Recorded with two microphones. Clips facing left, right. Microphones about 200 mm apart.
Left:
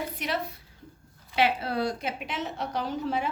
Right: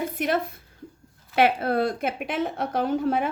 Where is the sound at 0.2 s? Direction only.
50° right (ahead or behind).